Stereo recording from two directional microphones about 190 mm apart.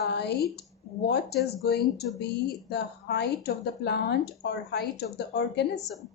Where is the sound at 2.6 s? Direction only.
60° left (ahead or behind).